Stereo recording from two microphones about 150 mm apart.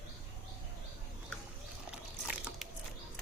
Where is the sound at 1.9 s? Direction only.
5° right (ahead or behind).